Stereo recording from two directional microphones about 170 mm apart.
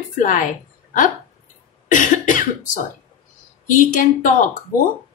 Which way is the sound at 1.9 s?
50° left (ahead or behind).